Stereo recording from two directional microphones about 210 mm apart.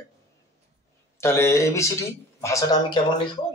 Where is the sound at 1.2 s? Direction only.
10° left (ahead or behind).